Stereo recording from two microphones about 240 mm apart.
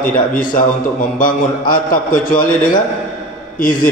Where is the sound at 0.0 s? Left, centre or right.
Left.